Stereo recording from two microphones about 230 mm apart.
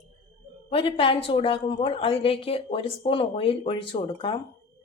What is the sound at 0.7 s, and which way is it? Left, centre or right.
A woman's voice, left.